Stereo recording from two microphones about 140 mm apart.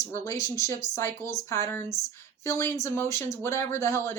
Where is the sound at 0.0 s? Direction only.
25° left (ahead or behind).